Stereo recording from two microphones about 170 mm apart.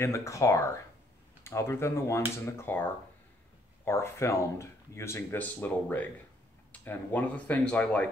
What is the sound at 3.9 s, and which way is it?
Speech, 15° left (ahead or behind).